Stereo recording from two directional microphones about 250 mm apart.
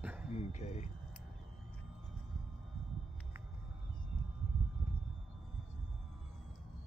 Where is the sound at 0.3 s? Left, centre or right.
Left.